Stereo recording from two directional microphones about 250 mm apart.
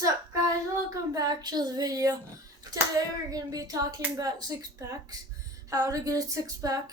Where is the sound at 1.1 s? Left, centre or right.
Centre.